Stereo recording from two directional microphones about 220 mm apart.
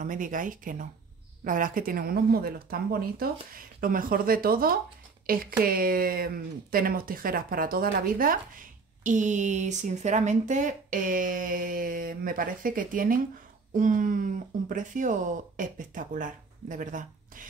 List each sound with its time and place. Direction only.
0.0 s speech: 35° right (ahead or behind)